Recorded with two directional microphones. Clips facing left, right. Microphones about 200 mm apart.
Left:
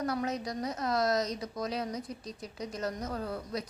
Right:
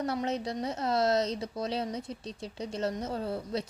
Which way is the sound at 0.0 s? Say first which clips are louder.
Right 1 dB; 25° right (ahead or behind).